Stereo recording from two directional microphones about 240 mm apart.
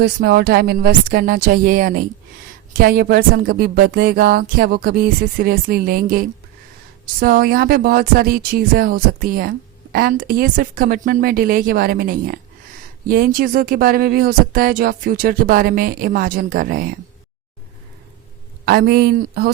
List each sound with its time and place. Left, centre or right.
0.0 s speech: right
18.6 s speech: right